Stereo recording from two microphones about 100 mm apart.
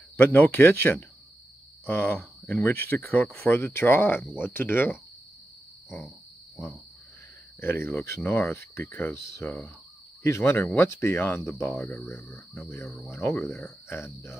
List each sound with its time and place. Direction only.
0.2 s speech: 20° left (ahead or behind)
5.9 s frog: centre (ahead or behind)
7.6 s speech: 25° left (ahead or behind)
12.8 s speech: 5° left (ahead or behind)
13.1 s speech: 20° left (ahead or behind)